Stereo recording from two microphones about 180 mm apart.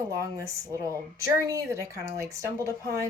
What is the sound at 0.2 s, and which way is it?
A woman's voice, 20° right (ahead or behind).